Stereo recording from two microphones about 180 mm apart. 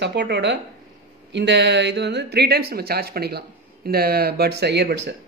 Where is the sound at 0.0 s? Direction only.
75° right (ahead or behind).